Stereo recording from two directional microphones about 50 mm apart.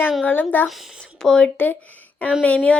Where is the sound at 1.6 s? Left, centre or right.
Left.